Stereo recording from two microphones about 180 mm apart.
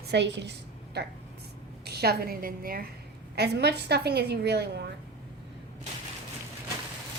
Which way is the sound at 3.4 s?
65° right (ahead or behind).